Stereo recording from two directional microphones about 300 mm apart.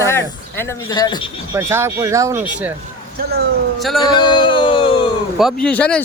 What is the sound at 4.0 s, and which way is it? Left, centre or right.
Speech, centre.